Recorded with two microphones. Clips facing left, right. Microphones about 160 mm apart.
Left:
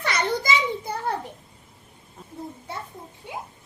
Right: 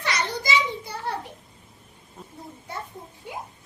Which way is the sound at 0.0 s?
55° left (ahead or behind).